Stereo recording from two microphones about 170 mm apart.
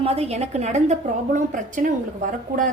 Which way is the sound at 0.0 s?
40° right (ahead or behind).